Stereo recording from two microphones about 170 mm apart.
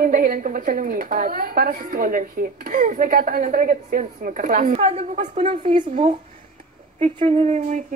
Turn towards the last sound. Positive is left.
turn(degrees=-40)  # may be behind; listen again after turning